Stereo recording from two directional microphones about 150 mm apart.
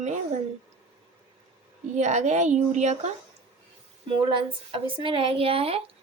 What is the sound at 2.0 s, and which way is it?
A woman's voice, 50° right (ahead or behind).